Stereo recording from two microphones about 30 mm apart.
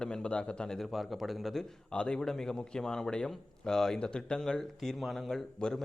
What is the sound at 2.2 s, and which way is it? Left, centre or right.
Speech, centre.